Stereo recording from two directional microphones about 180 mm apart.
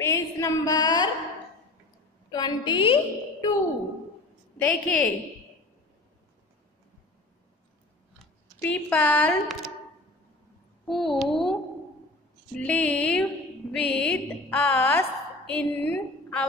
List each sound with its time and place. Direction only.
0.0 s a sound: 15° left (ahead or behind)
2.3 s a woman's voice: 25° left (ahead or behind)
4.6 s a woman's voice: 5° left (ahead or behind)
8.6 s a woman's voice: 10° left (ahead or behind)
10.9 s a sound: centre (ahead or behind)
12.5 s music: 5° left (ahead or behind)